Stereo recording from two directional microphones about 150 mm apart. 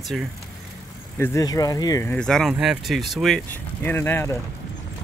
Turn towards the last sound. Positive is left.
turn(degrees=15)  # may be behind; listen again after turning